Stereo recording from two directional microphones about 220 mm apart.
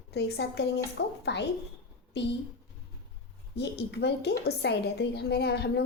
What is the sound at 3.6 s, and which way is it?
A woman's voice, 50° left (ahead or behind).